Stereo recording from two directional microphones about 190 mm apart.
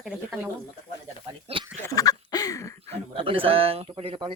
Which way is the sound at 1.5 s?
25° right (ahead or behind).